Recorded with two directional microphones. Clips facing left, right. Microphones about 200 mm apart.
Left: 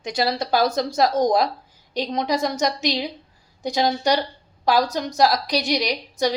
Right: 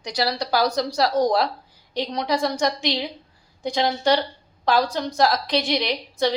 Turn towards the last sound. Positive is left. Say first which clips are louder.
# even
turn(degrees=15)  # may be behind; listen again after turning